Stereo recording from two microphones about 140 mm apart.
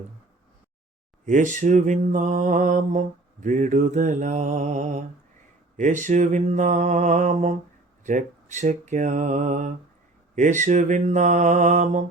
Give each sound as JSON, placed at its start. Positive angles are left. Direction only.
{"t": 1.2, "sound": "mantra", "side_deg": -65}